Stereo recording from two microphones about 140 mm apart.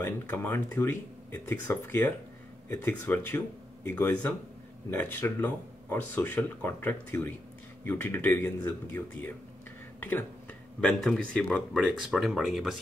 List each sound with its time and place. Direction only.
0.0 s speech: 15° left (ahead or behind)
9.9 s a sound: 15° left (ahead or behind)
10.8 s speech: 5° left (ahead or behind)